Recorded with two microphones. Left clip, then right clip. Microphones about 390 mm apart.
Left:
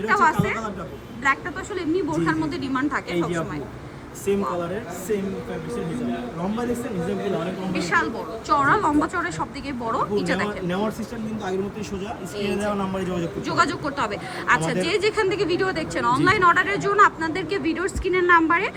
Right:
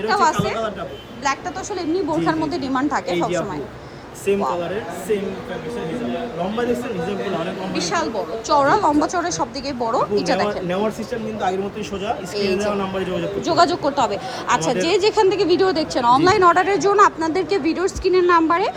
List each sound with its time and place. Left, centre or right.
0.1 s speech: centre
7.7 s speech: centre
12.0 s speech: centre